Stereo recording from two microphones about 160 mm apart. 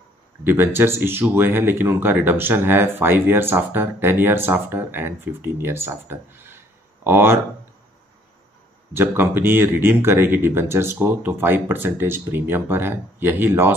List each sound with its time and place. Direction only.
0.4 s speech: 15° right (ahead or behind)
8.9 s speech: 15° right (ahead or behind)